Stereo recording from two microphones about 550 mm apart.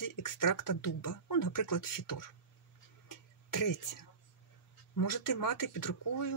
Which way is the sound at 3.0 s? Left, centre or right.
Left.